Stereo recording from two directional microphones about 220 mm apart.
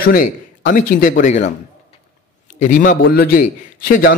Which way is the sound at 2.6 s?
35° left (ahead or behind).